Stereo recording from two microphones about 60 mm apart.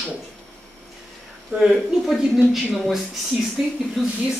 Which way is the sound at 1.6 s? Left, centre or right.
Centre.